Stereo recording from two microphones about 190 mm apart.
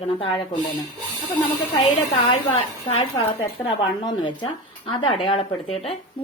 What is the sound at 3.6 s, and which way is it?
Speech, 25° left (ahead or behind).